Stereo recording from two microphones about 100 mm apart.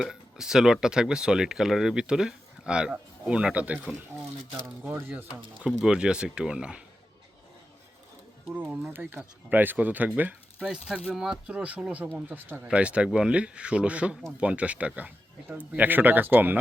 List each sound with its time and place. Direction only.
0.0 s speech: 5° right (ahead or behind)
5.6 s speech: 10° right (ahead or behind)
8.4 s speech: 15° right (ahead or behind)